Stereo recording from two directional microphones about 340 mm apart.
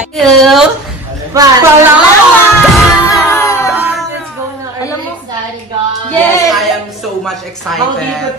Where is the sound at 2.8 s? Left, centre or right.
Centre.